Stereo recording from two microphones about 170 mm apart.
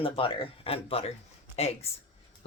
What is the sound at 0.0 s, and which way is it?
Speech, 30° left (ahead or behind).